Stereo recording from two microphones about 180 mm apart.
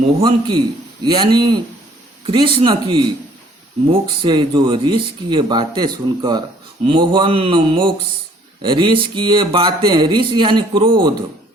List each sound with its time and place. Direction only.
0.2 s speech: 25° right (ahead or behind)